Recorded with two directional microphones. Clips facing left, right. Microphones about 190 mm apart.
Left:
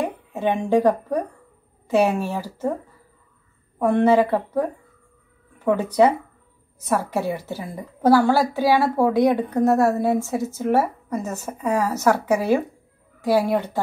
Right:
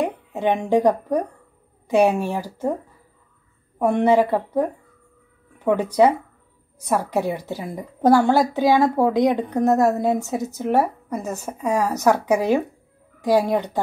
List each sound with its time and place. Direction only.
0.0 s a sound: 15° right (ahead or behind)
0.7 s a woman's voice: 15° right (ahead or behind)
3.8 s a woman's voice: 15° right (ahead or behind)